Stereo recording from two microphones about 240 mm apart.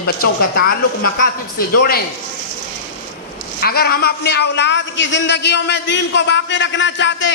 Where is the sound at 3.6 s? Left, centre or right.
Left.